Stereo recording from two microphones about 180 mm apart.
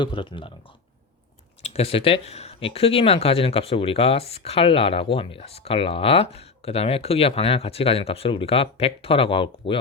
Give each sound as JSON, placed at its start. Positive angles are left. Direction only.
{"t": 0.0, "sound": "speech", "side_deg": 25}
{"t": 1.6, "sound": "speech", "side_deg": 35}